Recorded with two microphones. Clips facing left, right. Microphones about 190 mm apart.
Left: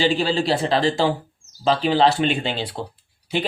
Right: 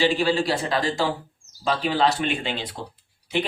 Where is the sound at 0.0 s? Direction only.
30° left (ahead or behind).